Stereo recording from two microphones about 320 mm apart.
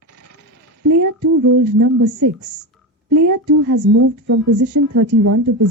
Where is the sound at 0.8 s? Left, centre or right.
Right.